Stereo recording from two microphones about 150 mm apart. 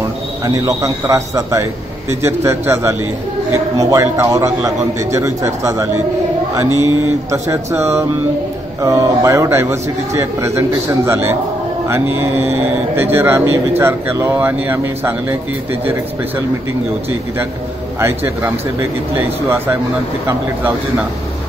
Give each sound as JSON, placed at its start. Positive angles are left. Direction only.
{"t": 0.5, "sound": "a man's voice", "side_deg": -25}
{"t": 7.2, "sound": "a man's voice", "side_deg": -20}
{"t": 18.0, "sound": "speech", "side_deg": -15}